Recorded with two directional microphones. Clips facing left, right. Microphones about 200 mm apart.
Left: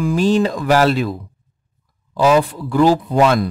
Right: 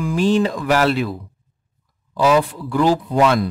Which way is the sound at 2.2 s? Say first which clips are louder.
Left 2 dB; 40° left (ahead or behind).